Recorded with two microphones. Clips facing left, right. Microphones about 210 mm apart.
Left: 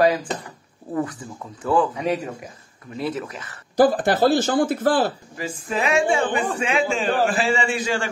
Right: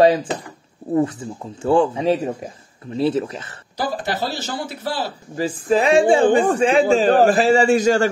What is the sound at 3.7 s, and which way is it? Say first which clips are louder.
A man's voice: left 7 dB; 50° left (ahead or behind).